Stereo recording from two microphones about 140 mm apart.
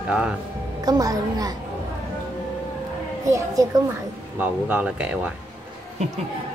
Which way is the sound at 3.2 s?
25° right (ahead or behind).